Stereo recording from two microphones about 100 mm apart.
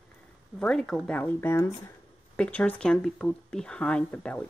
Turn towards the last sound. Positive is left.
turn(degrees=10)  # may be behind; listen again after turning